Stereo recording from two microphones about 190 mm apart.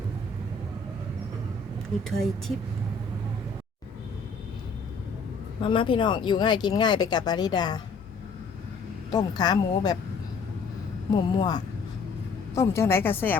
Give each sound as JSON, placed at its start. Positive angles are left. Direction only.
{"t": 2.0, "sound": "speech", "side_deg": 0}
{"t": 5.6, "sound": "speech", "side_deg": 25}
{"t": 9.1, "sound": "speech", "side_deg": 20}
{"t": 11.1, "sound": "speech", "side_deg": 25}